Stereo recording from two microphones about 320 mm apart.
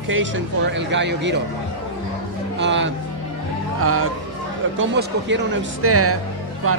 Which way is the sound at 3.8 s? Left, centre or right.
Right.